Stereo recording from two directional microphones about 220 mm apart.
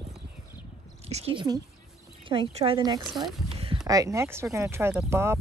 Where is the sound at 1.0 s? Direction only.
25° right (ahead or behind).